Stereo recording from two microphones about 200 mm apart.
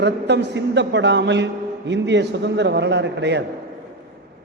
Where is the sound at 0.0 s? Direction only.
60° right (ahead or behind).